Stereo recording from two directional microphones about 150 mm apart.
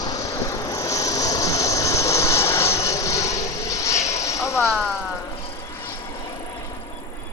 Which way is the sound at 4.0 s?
50° left (ahead or behind).